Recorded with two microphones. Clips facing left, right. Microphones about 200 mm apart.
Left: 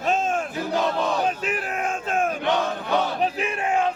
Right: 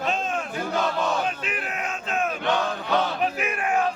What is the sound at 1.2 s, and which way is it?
Battle cry, 40° left (ahead or behind).